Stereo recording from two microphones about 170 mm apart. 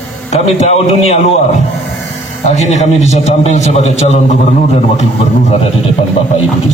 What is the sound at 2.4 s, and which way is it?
A man's voice, 40° left (ahead or behind).